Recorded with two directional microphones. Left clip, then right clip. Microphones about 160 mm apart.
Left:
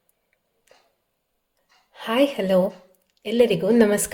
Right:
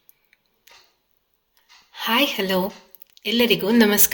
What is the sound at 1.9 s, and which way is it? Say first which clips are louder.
A woman's voice: right 1 dB; 30° left (ahead or behind).